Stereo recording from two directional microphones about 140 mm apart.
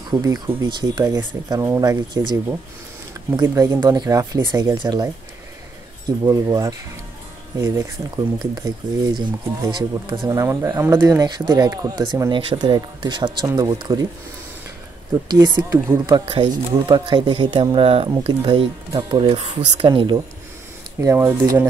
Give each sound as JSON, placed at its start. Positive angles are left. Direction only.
{"t": 0.1, "sound": "speech", "side_deg": -25}
{"t": 3.3, "sound": "speech", "side_deg": -25}
{"t": 15.2, "sound": "speech", "side_deg": -30}
{"t": 16.3, "sound": "speech", "side_deg": -35}
{"t": 21.2, "sound": "speech", "side_deg": -15}